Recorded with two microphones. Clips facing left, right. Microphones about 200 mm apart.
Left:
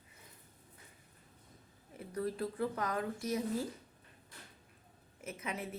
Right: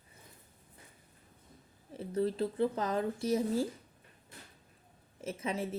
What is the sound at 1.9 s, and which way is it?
Speech, 25° right (ahead or behind).